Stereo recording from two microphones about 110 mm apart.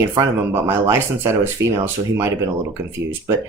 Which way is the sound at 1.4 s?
20° right (ahead or behind).